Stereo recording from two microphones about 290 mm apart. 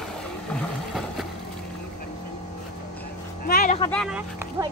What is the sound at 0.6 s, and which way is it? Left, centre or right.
Vehicle, centre.